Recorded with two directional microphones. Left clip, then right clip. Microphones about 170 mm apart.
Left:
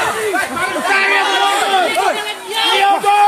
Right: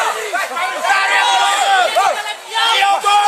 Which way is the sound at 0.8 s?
55° right (ahead or behind).